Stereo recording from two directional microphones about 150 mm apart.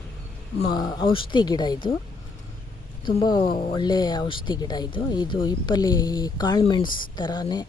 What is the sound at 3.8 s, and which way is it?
Speech, 30° left (ahead or behind).